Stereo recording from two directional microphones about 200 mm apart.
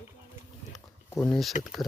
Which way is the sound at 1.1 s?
Centre (ahead or behind).